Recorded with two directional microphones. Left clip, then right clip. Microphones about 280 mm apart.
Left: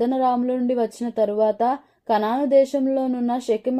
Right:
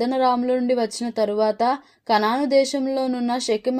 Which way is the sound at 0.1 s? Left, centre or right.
Right.